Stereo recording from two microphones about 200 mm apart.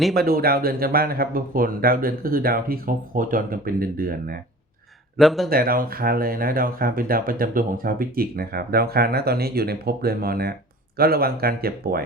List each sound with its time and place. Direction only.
0.1 s speech: 50° right (ahead or behind)
5.1 s speech: centre (ahead or behind)
5.5 s speech: 45° right (ahead or behind)